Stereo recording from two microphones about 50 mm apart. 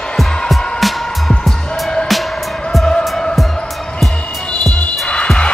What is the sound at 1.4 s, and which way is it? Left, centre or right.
Music, centre.